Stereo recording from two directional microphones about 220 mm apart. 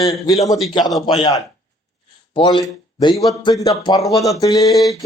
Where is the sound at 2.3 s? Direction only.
25° left (ahead or behind).